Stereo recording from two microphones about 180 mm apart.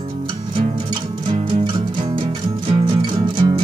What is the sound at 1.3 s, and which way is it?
Music, 30° right (ahead or behind).